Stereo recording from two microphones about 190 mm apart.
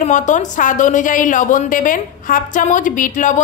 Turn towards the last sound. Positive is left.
turn(degrees=45)  # may be behind; listen again after turning